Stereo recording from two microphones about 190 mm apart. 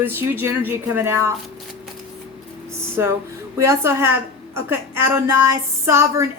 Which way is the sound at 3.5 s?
15° right (ahead or behind).